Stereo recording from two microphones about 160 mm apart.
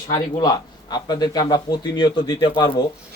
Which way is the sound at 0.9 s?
25° left (ahead or behind).